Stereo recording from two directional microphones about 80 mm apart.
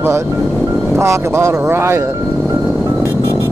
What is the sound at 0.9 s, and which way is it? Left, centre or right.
Speech, right.